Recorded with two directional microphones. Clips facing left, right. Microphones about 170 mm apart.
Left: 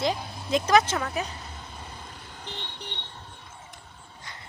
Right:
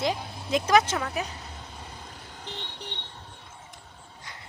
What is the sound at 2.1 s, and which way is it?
Vehicle, 40° right (ahead or behind).